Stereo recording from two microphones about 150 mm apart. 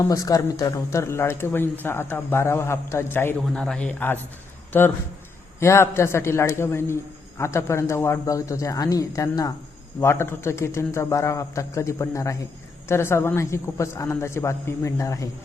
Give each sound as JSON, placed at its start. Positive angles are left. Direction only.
{"t": 0.0, "sound": "a man's voice", "side_deg": 25}